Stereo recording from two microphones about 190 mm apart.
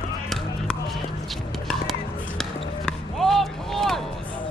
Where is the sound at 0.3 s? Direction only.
Centre (ahead or behind).